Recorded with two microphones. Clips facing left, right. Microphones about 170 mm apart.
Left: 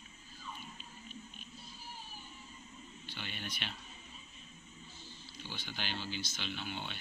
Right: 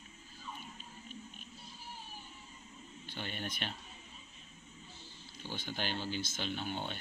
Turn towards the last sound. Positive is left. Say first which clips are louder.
# right 4 dB
turn(degrees=-45)  # may be behind; listen again after turning